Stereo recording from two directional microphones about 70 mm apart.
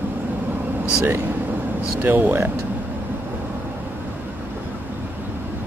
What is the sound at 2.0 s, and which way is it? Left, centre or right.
Speech, right.